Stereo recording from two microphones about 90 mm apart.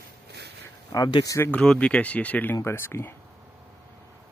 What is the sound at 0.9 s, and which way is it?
Speech, 45° left (ahead or behind).